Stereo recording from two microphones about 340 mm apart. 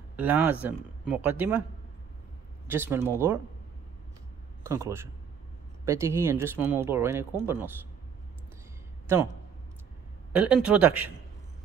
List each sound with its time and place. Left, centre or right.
0.1 s speech: centre
2.7 s speech: centre
4.6 s speech: centre
10.3 s speech: centre